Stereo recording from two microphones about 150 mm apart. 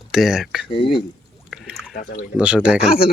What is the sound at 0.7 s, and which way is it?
Speech, 35° left (ahead or behind).